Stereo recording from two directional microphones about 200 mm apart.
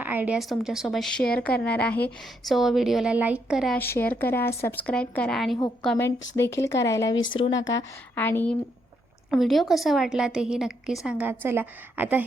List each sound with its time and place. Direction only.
0.0 s a woman's voice: 10° right (ahead or behind)
3.8 s a woman's voice: 10° left (ahead or behind)
6.3 s speech: 15° left (ahead or behind)
7.7 s a woman's voice: 15° left (ahead or behind); by 12.2 s 10° right (ahead or behind)